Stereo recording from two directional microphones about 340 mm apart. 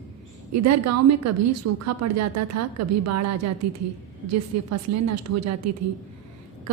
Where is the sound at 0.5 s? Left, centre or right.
Right.